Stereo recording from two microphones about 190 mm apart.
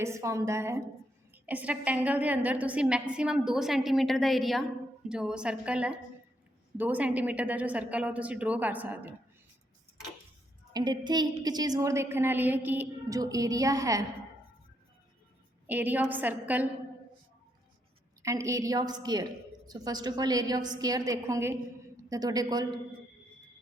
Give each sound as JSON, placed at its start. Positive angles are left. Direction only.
{"t": 0.0, "sound": "a woman's voice", "side_deg": -15}
{"t": 10.7, "sound": "a woman's voice", "side_deg": -20}
{"t": 15.6, "sound": "a woman's voice", "side_deg": -10}
{"t": 18.2, "sound": "a woman's voice", "side_deg": -15}